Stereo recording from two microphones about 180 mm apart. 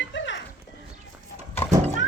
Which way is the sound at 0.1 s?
90° left.